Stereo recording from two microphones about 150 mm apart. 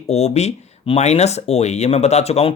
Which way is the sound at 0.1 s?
45° left (ahead or behind).